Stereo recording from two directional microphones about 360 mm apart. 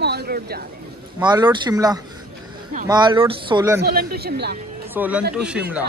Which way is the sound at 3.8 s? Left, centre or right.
Right.